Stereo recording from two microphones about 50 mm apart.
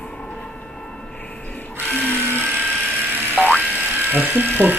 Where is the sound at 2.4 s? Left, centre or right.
Right.